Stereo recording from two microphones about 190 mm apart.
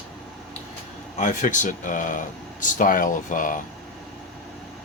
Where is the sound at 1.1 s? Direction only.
40° left (ahead or behind).